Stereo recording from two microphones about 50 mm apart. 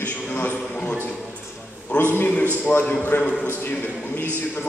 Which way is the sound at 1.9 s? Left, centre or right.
Left.